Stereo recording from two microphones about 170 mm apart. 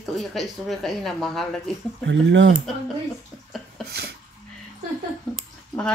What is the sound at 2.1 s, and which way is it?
Speech, 90° right.